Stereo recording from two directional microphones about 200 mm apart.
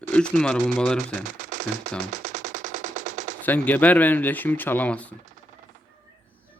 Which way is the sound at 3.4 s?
10° left (ahead or behind).